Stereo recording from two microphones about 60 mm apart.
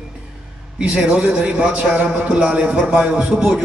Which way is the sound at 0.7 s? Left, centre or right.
Centre.